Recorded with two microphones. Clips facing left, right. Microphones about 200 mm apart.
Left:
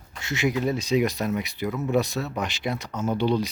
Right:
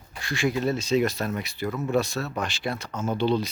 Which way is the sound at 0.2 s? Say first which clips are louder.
Left 1 dB; 20° left (ahead or behind).